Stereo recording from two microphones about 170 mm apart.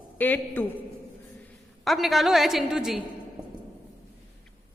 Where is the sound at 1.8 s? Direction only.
Centre (ahead or behind).